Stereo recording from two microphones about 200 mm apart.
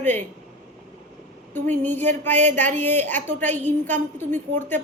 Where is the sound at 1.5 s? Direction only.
10° left (ahead or behind).